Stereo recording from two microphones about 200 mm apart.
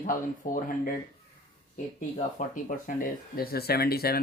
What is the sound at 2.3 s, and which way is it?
Speech, 40° left (ahead or behind).